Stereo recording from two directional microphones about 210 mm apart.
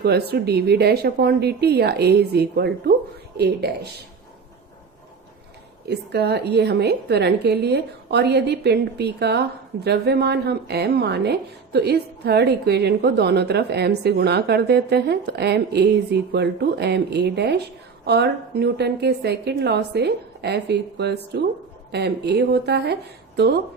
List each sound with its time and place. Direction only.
0.0 s a woman's voice: 50° right (ahead or behind)
5.9 s a woman's voice: 50° right (ahead or behind)